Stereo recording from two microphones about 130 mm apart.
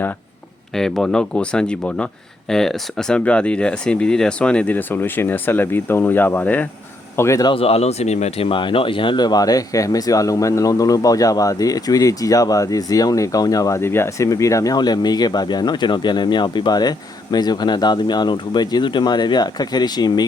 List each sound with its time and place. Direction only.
0.7 s speech: 5° left (ahead or behind); by 7.4 s 20° left (ahead or behind)
7.4 s speech: 45° left (ahead or behind)